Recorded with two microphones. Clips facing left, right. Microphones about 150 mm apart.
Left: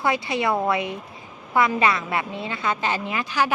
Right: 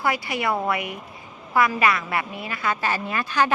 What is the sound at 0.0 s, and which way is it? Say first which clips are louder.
A woman's voice: left 2 dB; 20° left (ahead or behind).